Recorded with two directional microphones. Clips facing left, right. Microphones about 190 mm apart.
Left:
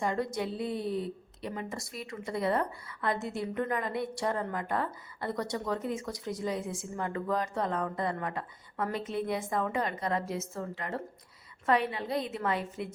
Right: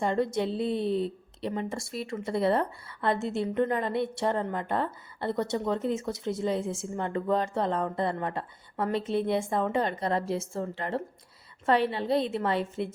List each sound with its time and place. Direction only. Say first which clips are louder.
0.0 s speech: right 4 dB; 25° right (ahead or behind)